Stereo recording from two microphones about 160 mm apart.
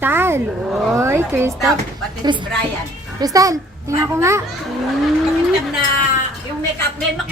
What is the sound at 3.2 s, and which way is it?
A child's voice, 20° right (ahead or behind).